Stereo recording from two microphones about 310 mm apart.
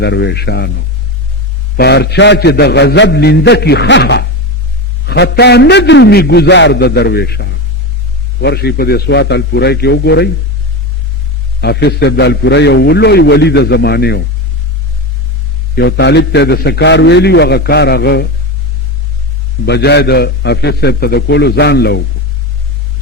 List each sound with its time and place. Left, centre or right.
0.0 s a man's voice: left
1.7 s a man's voice: left
11.6 s a man's voice: left
15.7 s a man's voice: left
19.6 s a man's voice: left